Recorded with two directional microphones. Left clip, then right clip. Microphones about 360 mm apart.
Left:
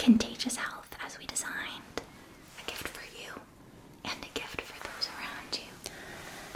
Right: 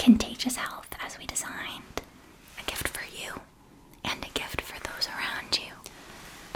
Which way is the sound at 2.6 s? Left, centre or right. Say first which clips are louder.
Right 6 dB; right.